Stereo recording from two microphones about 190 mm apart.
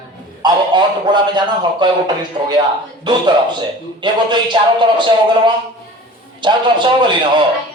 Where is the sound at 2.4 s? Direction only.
35° right (ahead or behind).